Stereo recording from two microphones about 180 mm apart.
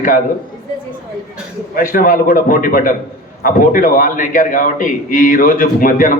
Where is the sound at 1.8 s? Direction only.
50° left (ahead or behind).